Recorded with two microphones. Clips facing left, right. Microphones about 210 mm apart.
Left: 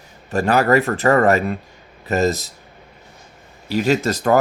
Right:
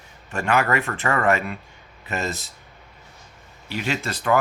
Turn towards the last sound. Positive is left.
turn(degrees=40)  # may be behind; listen again after turning